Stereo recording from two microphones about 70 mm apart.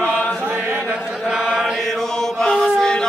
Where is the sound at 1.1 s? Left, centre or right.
Centre.